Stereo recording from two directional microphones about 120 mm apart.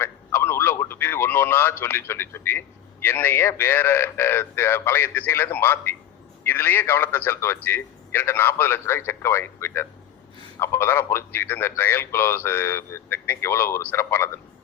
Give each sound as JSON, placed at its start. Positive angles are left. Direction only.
{"t": 0.0, "sound": "a man's voice", "side_deg": 20}